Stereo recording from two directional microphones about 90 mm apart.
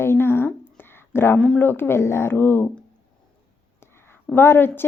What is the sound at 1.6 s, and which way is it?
A woman's voice, 25° left (ahead or behind).